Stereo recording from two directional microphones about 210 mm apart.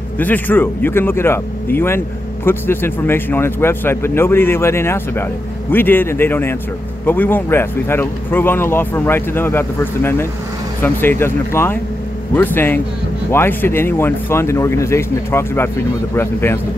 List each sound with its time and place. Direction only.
0.2 s speech: 10° left (ahead or behind)